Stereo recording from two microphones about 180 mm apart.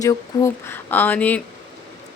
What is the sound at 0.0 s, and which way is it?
Speech, 20° left (ahead or behind).